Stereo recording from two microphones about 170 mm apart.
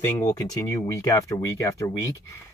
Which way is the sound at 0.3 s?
20° left (ahead or behind).